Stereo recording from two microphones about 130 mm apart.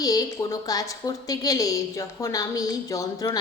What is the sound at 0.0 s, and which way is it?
A woman's voice, 30° left (ahead or behind).